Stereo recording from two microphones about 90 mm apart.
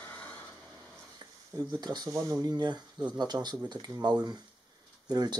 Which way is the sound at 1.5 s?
50° right (ahead or behind).